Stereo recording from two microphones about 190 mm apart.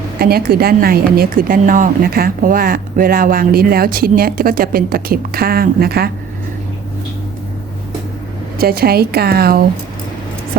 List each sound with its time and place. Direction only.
0.2 s speech: 50° right (ahead or behind)
8.5 s speech: 55° right (ahead or behind)